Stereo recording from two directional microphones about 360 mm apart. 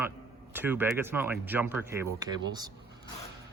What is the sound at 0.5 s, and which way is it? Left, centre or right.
Speech, centre.